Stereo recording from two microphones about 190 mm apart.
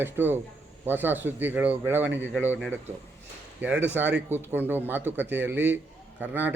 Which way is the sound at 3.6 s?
10° right (ahead or behind).